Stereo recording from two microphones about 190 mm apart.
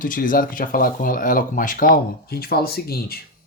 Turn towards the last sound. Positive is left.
turn(degrees=55)  # may be behind; listen again after turning